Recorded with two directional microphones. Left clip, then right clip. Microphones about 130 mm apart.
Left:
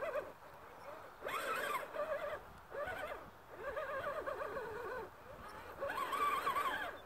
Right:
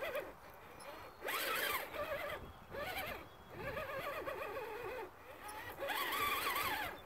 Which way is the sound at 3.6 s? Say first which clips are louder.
Left 1 dB; 40° right (ahead or behind).